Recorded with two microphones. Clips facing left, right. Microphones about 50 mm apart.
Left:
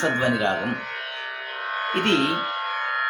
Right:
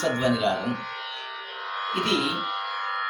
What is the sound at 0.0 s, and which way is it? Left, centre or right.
Speech, left.